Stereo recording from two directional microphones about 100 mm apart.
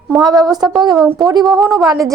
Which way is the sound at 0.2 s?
45° right (ahead or behind).